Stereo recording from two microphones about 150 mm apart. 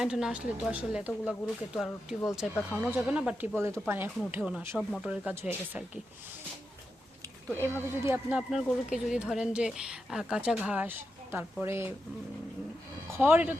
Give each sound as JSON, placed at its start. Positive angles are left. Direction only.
{"t": 0.0, "sound": "speech", "side_deg": -5}
{"t": 3.6, "sound": "speech", "side_deg": -15}
{"t": 4.8, "sound": "speech", "side_deg": 5}
{"t": 5.0, "sound": "speech", "side_deg": -10}
{"t": 7.7, "sound": "speech", "side_deg": -15}
{"t": 13.1, "sound": "speech", "side_deg": -10}